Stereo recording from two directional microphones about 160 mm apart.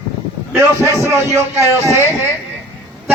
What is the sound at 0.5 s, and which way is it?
A man's voice, 20° right (ahead or behind).